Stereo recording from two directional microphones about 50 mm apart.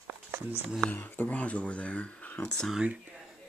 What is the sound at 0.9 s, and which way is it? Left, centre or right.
Speech, left.